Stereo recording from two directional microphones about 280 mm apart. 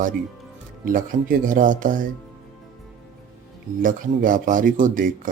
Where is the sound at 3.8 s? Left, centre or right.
Right.